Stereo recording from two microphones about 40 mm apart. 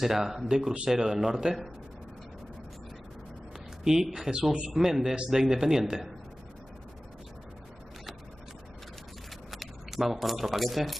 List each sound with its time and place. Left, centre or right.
0.0 s speech: centre
3.8 s speech: centre
4.3 s speech: right
4.6 s speech: centre
9.5 s speech: centre